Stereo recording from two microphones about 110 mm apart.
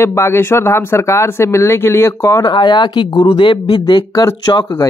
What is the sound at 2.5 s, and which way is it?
Speech, 45° left (ahead or behind).